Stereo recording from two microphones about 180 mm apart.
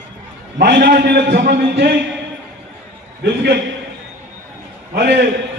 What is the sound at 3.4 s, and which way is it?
Speech, 70° right (ahead or behind).